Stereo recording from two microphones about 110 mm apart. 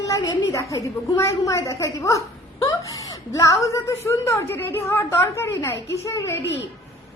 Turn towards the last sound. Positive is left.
turn(degrees=25)  # may be behind; listen again after turning